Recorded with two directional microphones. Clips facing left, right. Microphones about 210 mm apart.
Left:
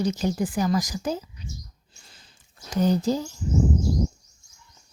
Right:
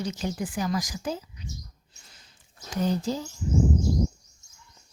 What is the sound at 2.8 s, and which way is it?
Speech, 40° left (ahead or behind).